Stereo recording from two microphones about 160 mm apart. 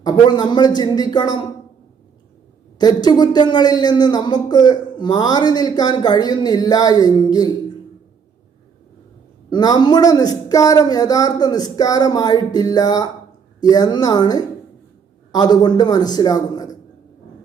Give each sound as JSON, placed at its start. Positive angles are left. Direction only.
{"t": 0.0, "sound": "a woman's voice", "side_deg": 25}
{"t": 2.7, "sound": "a woman's voice", "side_deg": 25}
{"t": 9.5, "sound": "a woman's voice", "side_deg": 25}